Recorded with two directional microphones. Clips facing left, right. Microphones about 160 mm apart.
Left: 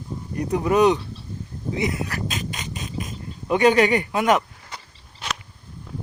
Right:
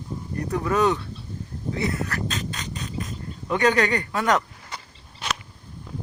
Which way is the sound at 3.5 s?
15° left (ahead or behind).